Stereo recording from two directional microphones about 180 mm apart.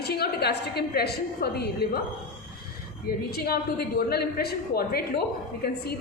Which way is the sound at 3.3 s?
60° left (ahead or behind).